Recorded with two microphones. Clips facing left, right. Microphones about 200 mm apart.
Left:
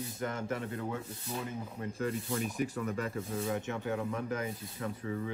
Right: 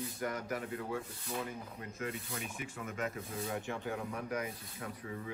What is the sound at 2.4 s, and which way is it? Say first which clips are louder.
Speech: left 9 dB; 40° left (ahead or behind).